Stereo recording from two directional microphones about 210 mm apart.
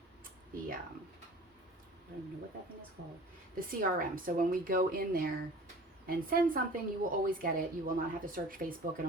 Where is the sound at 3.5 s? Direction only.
40° right (ahead or behind).